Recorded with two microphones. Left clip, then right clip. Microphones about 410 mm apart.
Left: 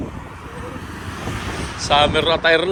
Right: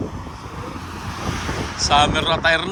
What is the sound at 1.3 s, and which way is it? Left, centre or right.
Vehicle, right.